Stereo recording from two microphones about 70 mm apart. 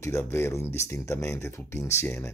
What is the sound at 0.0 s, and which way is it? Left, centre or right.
Speech, left.